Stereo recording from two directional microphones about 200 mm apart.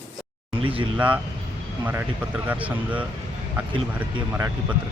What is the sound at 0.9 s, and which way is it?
Speech, 5° right (ahead or behind).